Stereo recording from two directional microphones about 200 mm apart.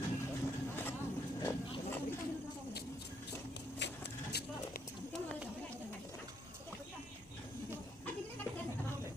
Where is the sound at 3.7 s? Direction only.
60° left (ahead or behind).